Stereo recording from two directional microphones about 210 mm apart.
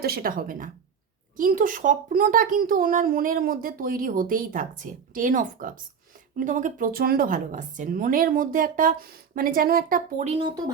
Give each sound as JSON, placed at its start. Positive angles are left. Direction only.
{"t": 0.0, "sound": "a woman's voice", "side_deg": -45}